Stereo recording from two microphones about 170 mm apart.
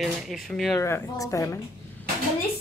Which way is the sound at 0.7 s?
15° left (ahead or behind).